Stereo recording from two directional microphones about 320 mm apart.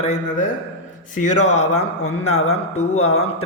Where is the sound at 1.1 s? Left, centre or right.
Left.